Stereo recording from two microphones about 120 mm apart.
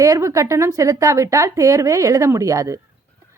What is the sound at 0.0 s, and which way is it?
A woman's voice, 25° right (ahead or behind).